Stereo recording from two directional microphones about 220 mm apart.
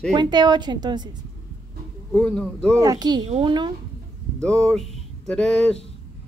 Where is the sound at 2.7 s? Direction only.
15° right (ahead or behind).